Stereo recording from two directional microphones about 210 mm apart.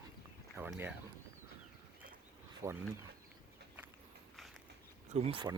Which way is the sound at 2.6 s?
15° right (ahead or behind).